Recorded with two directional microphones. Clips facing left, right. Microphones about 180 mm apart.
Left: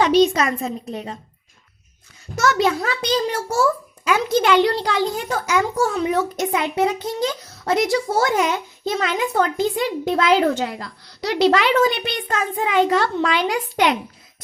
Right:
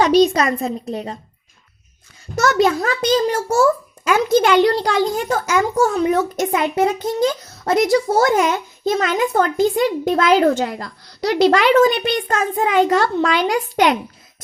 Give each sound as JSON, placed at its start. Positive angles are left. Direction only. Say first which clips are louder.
{"t": 0.0, "sound": "a child's voice", "louder": "right 2 dB", "side_deg": -40}
{"t": 2.3, "sound": "a child's voice", "louder": "right 3 dB", "side_deg": -40}